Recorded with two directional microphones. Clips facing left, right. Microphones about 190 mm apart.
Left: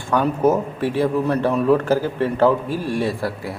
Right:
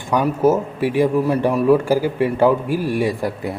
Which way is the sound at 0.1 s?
10° right (ahead or behind).